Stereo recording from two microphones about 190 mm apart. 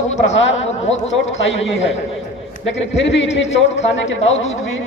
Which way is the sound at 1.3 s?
70° left (ahead or behind).